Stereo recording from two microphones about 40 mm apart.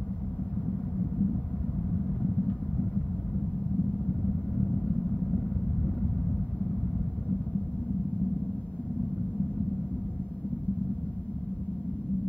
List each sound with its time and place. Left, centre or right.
0.7 s vehicle: left
4.1 s vehicle: left